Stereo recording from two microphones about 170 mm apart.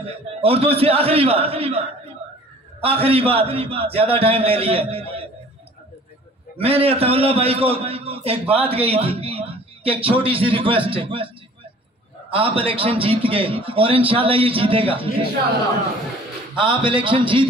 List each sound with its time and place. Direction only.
0.0 s a man's voice: 35° right (ahead or behind)
6.6 s a man's voice: 35° right (ahead or behind)
16.5 s a man's voice: 30° right (ahead or behind)